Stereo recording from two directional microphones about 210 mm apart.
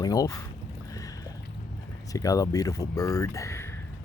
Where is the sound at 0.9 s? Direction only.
15° left (ahead or behind).